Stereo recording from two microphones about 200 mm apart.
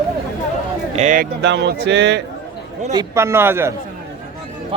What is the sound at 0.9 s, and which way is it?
Speech, 40° right (ahead or behind).